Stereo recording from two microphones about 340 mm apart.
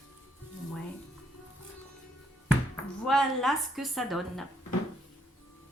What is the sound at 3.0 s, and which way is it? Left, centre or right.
Speech, centre.